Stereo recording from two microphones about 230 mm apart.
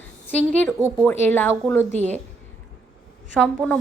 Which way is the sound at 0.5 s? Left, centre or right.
Centre.